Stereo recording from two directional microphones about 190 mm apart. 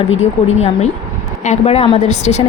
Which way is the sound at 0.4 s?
35° left (ahead or behind).